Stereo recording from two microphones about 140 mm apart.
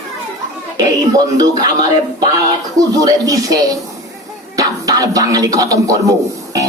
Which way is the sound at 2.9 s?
25° right (ahead or behind).